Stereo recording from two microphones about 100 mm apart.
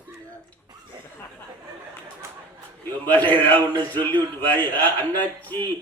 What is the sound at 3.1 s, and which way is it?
A man's voice, 15° left (ahead or behind).